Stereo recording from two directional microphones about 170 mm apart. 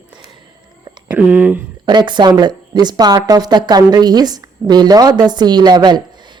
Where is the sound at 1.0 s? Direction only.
10° right (ahead or behind).